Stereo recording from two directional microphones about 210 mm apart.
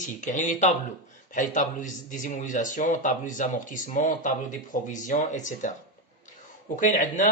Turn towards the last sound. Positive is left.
turn(degrees=35)  # may be behind; listen again after turning